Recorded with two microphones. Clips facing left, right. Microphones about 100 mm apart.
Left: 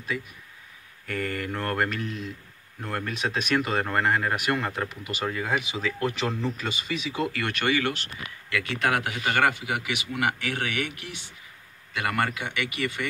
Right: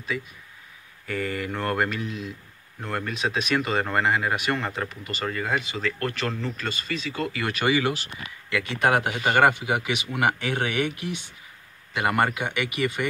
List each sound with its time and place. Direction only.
1.0 s speech: 5° right (ahead or behind)
7.3 s speech: 5° right (ahead or behind)
8.5 s speech: 25° right (ahead or behind)